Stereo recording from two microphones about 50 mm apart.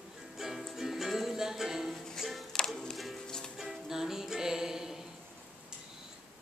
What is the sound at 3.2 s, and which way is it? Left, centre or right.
Music, centre.